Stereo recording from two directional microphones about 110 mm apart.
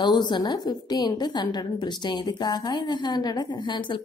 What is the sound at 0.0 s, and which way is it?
A woman's voice, 40° left (ahead or behind).